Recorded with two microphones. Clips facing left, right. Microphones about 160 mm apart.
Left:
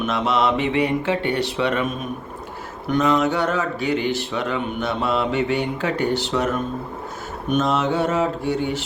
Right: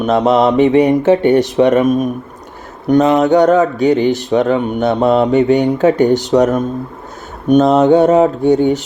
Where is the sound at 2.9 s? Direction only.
40° right (ahead or behind).